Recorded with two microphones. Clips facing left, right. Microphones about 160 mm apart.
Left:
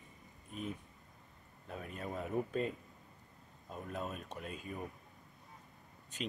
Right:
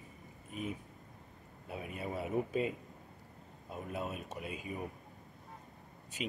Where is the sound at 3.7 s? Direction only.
5° right (ahead or behind).